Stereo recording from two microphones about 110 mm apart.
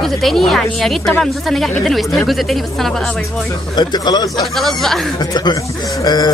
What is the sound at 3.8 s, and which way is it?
Speech, 40° left (ahead or behind).